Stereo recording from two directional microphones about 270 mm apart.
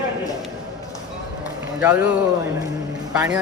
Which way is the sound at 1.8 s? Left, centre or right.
Centre.